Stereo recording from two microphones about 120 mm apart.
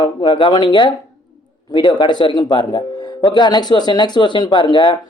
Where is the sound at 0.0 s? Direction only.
40° left (ahead or behind).